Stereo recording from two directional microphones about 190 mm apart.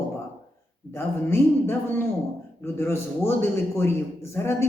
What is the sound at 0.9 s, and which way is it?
Speech, 10° left (ahead or behind).